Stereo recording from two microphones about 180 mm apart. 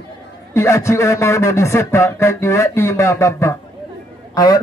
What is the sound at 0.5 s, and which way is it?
A man's voice, 15° left (ahead or behind).